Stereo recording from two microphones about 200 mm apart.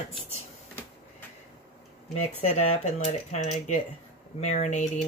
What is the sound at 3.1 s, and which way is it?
Speech, 35° left (ahead or behind).